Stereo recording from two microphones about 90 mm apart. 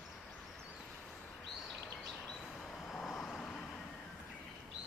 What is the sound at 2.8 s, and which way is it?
Vehicle, centre (ahead or behind).